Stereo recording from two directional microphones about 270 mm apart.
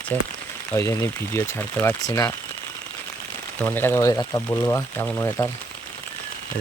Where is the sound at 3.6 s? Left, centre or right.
Centre.